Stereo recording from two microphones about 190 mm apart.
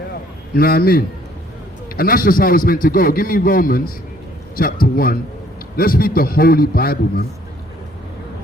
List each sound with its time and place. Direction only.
0.5 s a man's voice: 50° left (ahead or behind)